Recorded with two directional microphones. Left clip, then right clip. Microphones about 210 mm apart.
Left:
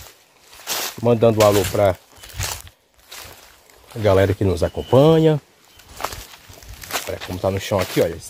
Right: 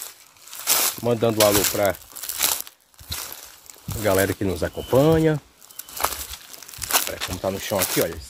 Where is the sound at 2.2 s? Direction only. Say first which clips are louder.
Right 4 dB; 50° right (ahead or behind).